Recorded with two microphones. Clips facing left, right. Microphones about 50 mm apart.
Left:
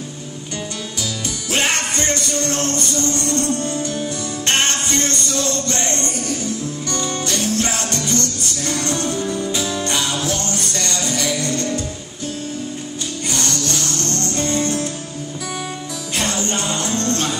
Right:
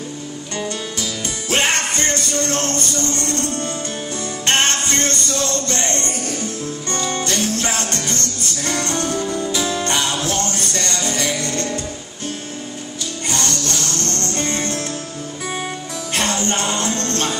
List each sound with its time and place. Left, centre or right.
1.5 s music: right
13.8 s music: right
16.2 s music: right